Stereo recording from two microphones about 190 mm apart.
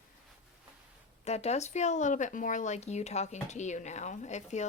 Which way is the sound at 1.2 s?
35° left (ahead or behind).